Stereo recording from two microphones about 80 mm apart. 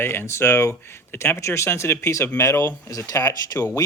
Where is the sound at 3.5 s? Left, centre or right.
Left.